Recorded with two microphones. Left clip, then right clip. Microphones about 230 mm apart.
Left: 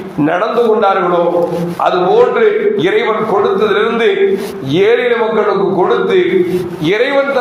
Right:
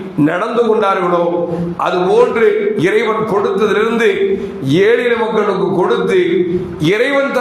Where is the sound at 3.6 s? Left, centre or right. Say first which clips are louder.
Left 1 dB; right.